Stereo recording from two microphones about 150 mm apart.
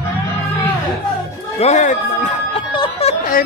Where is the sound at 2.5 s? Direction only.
35° left (ahead or behind).